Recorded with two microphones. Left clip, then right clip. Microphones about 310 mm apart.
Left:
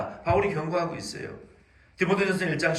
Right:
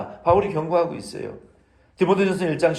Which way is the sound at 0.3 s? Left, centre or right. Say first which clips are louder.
Right 5 dB; right.